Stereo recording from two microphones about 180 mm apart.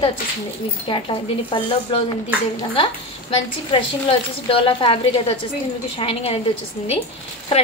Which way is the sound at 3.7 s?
30° left (ahead or behind).